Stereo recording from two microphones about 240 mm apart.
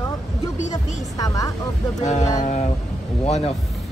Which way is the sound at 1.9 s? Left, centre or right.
Left.